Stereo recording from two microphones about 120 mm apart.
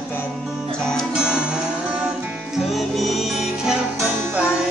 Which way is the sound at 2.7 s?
Centre (ahead or behind).